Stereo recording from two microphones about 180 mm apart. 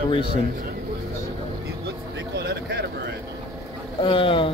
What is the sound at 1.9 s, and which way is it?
Vehicle, 70° right (ahead or behind).